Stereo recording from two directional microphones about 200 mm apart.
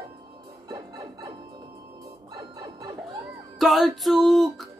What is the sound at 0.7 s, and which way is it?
Music, 20° right (ahead or behind).